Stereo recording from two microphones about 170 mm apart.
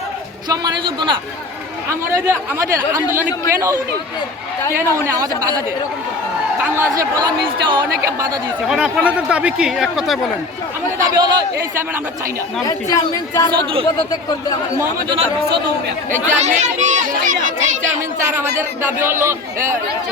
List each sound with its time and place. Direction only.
0.4 s speech: 25° right (ahead or behind)
1.9 s speech: 15° right (ahead or behind)
4.8 s speech: 15° right (ahead or behind)
8.6 s speech: 5° right (ahead or behind)
11.0 s speech: 25° right (ahead or behind)
12.6 s speech: 20° left (ahead or behind)
16.2 s speech: 45° right (ahead or behind)
18.3 s speech: 10° right (ahead or behind)